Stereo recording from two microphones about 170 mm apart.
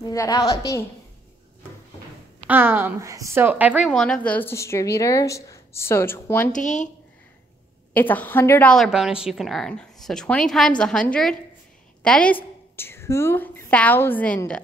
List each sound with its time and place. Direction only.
0.0 s a woman's voice: 20° left (ahead or behind)
2.4 s a woman's voice: 10° right (ahead or behind)
3.9 s speech: 5° left (ahead or behind)
6.5 s speech: 45° left (ahead or behind)
7.9 s a woman's voice: 10° left (ahead or behind)